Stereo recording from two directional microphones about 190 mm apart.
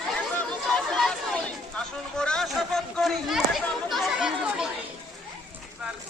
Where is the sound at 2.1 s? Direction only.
5° left (ahead or behind).